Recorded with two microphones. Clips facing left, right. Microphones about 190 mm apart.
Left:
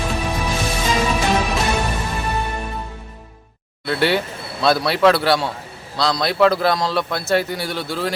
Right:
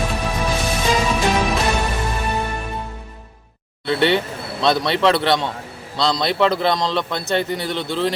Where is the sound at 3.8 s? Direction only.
5° left (ahead or behind).